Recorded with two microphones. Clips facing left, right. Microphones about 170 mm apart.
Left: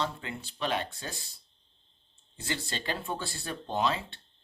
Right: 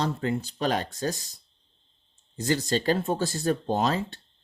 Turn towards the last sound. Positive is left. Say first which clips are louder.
# right 5 dB
turn(degrees=-40)  # may be behind; listen again after turning